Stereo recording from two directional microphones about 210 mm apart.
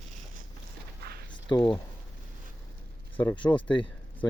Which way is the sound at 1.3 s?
20° left (ahead or behind).